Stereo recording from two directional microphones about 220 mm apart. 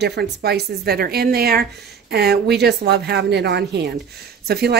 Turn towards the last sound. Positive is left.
turn(degrees=-45)  # may be behind; listen again after turning